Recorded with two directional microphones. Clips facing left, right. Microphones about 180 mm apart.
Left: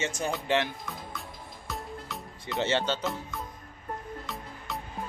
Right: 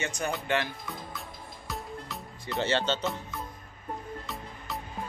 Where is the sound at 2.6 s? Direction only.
15° left (ahead or behind).